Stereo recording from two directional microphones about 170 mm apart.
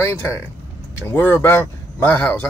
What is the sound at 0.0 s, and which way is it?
Speech, 15° left (ahead or behind).